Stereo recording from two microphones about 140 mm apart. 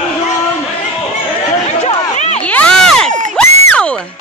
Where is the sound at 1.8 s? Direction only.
50° left (ahead or behind).